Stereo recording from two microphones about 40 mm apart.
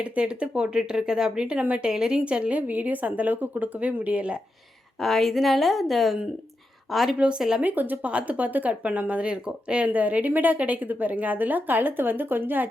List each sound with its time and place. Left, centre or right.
0.0 s speech: right
2.2 s speech: right
2.6 s a woman's voice: right
4.0 s speech: right
4.9 s speech: centre
7.2 s speech: right
7.6 s a woman's voice: right
8.0 s speech: right
9.9 s a woman's voice: right